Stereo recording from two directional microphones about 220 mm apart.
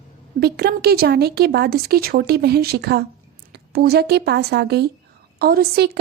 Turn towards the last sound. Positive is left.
turn(degrees=-45)  # may be behind; listen again after turning